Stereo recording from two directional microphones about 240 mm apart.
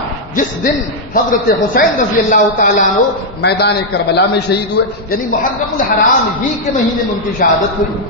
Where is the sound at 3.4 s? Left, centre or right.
Left.